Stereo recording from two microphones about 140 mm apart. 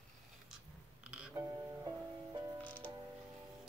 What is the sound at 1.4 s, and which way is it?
Speech, 20° right (ahead or behind).